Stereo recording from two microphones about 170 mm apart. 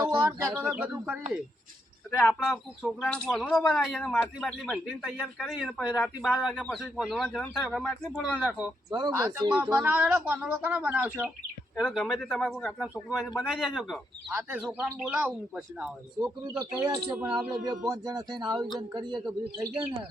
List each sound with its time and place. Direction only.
0.0 s bird: 25° right (ahead or behind)
0.3 s speech: 10° right (ahead or behind)
2.0 s speech: 5° left (ahead or behind)
8.9 s speech: 25° right (ahead or behind); by 12.7 s 5° left (ahead or behind)
12.8 s speech: 5° right (ahead or behind)
16.6 s speech: 20° right (ahead or behind)